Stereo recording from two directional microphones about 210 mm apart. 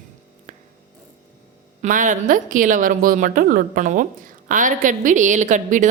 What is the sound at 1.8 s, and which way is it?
A woman's voice, 40° right (ahead or behind).